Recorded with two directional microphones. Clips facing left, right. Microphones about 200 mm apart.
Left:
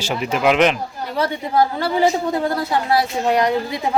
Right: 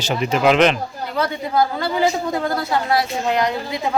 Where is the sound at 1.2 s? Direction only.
25° left (ahead or behind).